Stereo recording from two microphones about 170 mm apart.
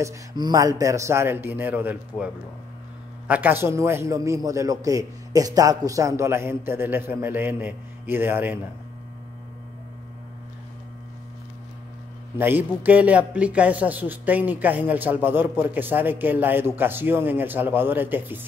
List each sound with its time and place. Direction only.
0.0 s a man's voice: 20° right (ahead or behind)
12.4 s a man's voice: 10° right (ahead or behind)